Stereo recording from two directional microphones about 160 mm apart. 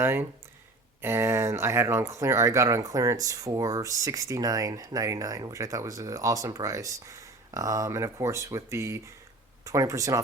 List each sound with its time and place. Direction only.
0.0 s speech: 15° right (ahead or behind)